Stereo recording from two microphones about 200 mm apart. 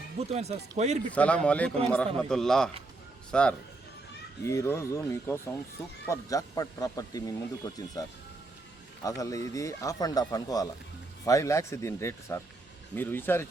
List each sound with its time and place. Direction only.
0.2 s speech: 30° right (ahead or behind)
1.1 s a man's voice: 5° left (ahead or behind)
9.0 s speech: 15° left (ahead or behind)